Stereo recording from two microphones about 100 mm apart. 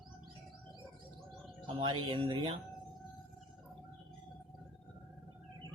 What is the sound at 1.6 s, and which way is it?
Speech, 60° right (ahead or behind).